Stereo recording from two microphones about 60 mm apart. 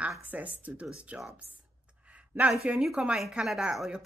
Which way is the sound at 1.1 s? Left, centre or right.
Right.